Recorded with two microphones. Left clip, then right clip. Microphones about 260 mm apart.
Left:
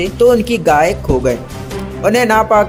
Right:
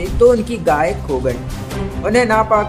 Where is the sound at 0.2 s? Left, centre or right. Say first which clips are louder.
Left 1 dB; centre.